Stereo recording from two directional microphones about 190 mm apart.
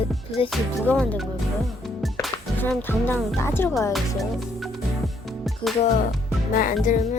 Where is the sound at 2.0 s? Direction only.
Centre (ahead or behind).